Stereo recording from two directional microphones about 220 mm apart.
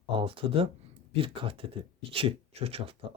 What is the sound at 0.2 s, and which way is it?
Speech, 25° right (ahead or behind).